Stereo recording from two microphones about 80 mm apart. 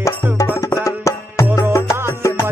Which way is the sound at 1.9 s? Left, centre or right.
Right.